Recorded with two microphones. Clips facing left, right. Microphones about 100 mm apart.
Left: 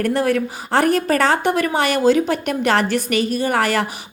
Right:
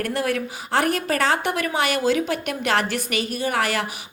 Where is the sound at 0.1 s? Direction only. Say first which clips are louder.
Left 6 dB; 35° left (ahead or behind).